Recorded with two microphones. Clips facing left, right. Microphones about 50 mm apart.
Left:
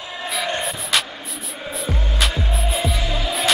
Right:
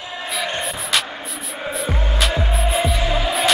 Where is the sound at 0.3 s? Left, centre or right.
Centre.